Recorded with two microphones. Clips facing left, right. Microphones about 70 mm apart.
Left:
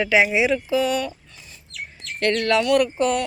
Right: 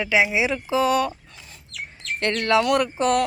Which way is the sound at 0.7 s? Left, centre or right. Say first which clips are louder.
Right 4 dB; right.